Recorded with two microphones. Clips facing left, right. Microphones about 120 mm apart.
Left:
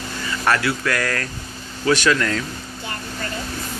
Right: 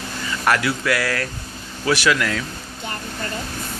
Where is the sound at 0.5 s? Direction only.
15° right (ahead or behind).